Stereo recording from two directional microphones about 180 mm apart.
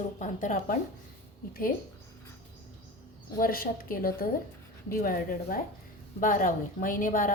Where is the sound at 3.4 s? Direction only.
55° left (ahead or behind).